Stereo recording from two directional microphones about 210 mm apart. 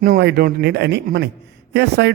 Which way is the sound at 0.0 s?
50° right (ahead or behind).